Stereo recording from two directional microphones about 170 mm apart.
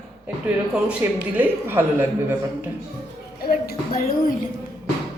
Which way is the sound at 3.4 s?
60° left (ahead or behind).